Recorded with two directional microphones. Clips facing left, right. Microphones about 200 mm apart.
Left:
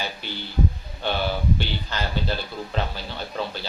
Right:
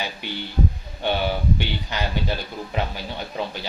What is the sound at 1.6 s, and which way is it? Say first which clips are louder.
Speech: right 2 dB; 15° right (ahead or behind).